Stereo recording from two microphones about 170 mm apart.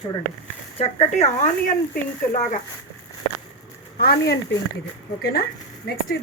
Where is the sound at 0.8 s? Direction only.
40° left (ahead or behind).